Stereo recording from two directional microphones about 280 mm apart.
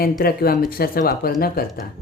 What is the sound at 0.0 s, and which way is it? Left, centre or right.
Speech, left.